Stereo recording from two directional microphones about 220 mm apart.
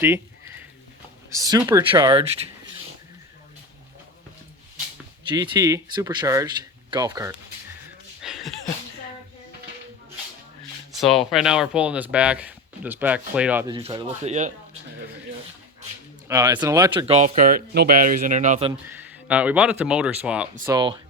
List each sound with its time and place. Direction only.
0.0 s a sound: 10° right (ahead or behind)
1.3 s speech: 15° right (ahead or behind)
5.3 s speech: 20° right (ahead or behind)
8.2 s a sound: centre (ahead or behind)
10.9 s speech: centre (ahead or behind)
13.7 s speech: 20° right (ahead or behind)
16.3 s speech: 20° right (ahead or behind)
18.7 s speech: 10° right (ahead or behind)